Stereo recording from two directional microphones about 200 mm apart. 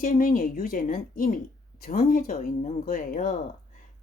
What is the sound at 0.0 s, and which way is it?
Speech, 40° left (ahead or behind).